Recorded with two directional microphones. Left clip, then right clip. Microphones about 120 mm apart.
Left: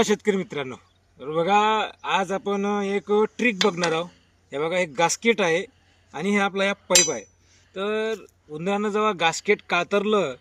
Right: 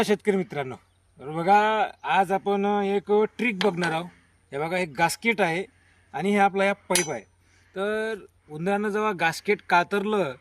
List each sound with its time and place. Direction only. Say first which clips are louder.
0.0 s speech: left 1 dB; 35° right (ahead or behind)